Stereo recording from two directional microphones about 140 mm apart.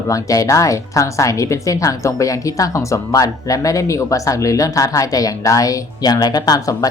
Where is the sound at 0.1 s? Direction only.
25° left (ahead or behind).